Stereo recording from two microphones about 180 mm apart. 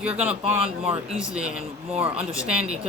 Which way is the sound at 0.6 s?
35° right (ahead or behind).